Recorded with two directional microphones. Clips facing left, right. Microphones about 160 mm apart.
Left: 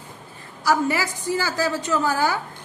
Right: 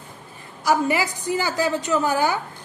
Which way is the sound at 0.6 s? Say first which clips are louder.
Right 1 dB; 15° right (ahead or behind).